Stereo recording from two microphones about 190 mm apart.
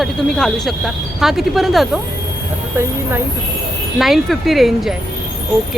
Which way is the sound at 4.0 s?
Centre (ahead or behind).